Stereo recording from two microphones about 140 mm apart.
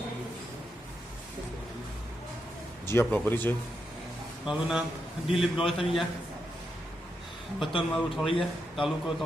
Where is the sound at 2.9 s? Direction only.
15° left (ahead or behind).